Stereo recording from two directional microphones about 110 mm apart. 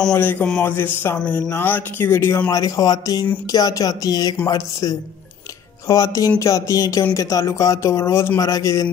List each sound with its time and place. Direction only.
0.1 s speech: 20° left (ahead or behind)
2.5 s speech: 30° left (ahead or behind)